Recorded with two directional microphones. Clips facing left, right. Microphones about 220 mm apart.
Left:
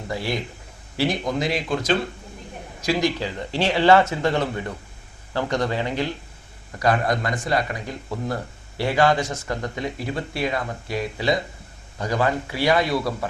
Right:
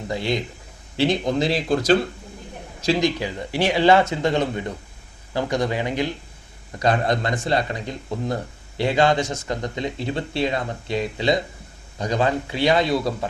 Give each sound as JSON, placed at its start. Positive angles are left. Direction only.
{"t": 0.1, "sound": "speech", "side_deg": -20}
{"t": 2.8, "sound": "speech", "side_deg": -20}